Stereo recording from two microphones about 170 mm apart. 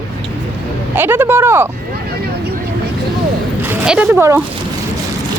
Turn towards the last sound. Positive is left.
turn(degrees=-15)  # may be behind; listen again after turning